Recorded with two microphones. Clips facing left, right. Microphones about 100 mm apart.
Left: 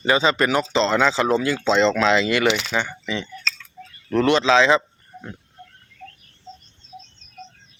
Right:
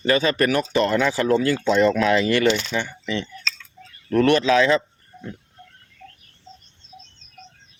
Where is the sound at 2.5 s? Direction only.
80° left.